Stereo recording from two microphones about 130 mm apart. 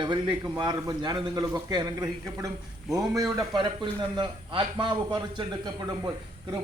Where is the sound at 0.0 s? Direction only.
35° right (ahead or behind).